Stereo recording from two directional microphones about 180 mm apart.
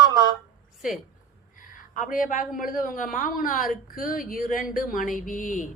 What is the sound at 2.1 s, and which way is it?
Speech, 50° left (ahead or behind).